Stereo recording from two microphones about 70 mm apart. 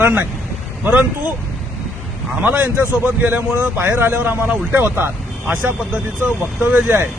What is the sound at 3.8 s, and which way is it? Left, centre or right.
A man's voice, right.